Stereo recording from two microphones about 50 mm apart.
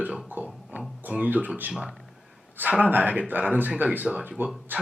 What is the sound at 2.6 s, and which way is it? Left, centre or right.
A man's voice, right.